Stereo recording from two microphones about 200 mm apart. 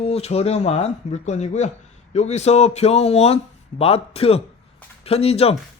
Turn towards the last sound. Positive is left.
turn(degrees=30)  # may be behind; listen again after turning